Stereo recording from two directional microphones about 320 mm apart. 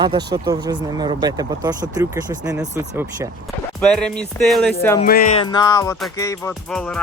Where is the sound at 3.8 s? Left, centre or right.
Centre.